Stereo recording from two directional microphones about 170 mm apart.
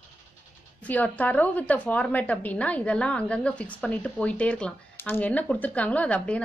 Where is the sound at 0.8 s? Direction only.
10° left (ahead or behind).